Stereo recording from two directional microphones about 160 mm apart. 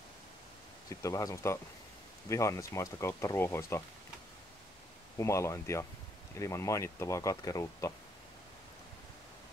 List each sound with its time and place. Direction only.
0.8 s speech: 20° left (ahead or behind)
5.1 s speech: 20° left (ahead or behind)